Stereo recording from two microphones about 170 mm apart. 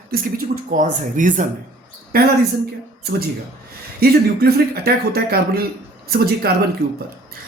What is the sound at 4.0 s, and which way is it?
Speech, 65° right (ahead or behind).